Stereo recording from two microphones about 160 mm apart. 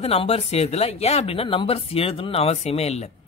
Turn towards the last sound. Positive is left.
turn(degrees=40)  # may be behind; listen again after turning